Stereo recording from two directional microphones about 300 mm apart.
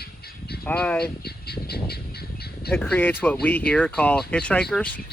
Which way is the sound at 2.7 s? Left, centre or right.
Centre.